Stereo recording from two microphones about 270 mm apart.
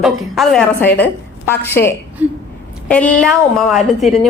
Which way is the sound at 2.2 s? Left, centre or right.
Centre.